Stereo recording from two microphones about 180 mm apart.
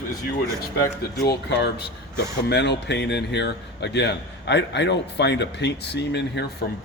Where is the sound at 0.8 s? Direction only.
15° left (ahead or behind).